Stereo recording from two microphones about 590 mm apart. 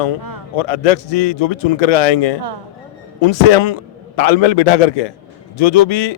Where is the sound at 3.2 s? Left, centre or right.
Left.